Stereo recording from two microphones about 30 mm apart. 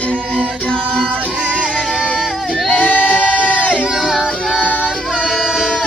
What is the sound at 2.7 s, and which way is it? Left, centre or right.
Singing, left.